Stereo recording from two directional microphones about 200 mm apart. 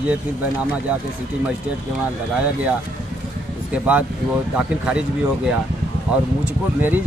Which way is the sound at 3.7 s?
5° right (ahead or behind).